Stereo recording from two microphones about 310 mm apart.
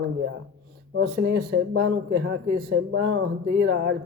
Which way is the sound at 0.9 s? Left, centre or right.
Right.